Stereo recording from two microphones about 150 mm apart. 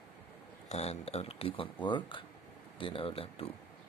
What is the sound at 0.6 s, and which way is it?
Speech, 45° left (ahead or behind).